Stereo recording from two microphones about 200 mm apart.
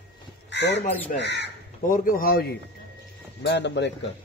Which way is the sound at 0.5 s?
60° left (ahead or behind).